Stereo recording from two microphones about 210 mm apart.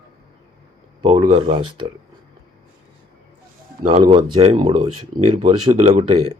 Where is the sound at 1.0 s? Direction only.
25° right (ahead or behind).